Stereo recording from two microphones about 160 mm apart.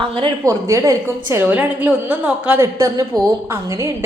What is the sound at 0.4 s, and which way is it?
A woman's voice, 20° right (ahead or behind).